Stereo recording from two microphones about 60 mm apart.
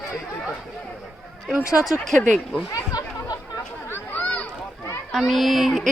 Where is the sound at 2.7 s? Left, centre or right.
Left.